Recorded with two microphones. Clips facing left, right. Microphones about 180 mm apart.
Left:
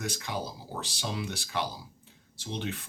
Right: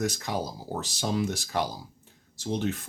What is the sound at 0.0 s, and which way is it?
Speech, 40° right (ahead or behind).